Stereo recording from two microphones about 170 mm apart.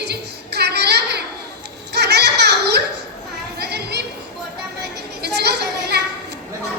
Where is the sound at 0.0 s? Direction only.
75° right (ahead or behind).